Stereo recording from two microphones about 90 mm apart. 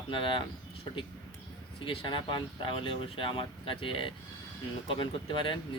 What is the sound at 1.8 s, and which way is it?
Speech, 70° left (ahead or behind).